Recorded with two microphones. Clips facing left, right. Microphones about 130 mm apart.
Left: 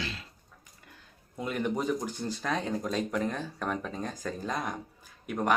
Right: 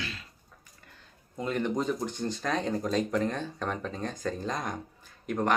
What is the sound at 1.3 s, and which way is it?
Speech, 10° left (ahead or behind).